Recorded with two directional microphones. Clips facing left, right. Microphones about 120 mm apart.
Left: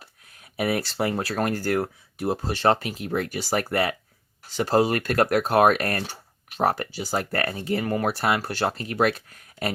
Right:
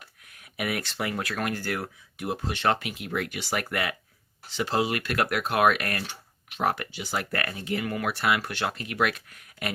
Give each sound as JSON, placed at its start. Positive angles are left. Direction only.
{"t": 0.0, "sound": "speech", "side_deg": 30}